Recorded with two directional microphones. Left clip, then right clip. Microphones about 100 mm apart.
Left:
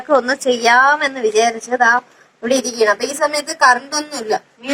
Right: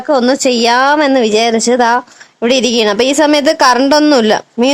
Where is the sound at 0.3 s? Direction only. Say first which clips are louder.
Right 3 dB; 30° right (ahead or behind).